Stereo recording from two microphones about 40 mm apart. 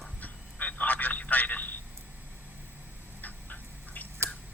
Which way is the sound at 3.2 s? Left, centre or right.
Left.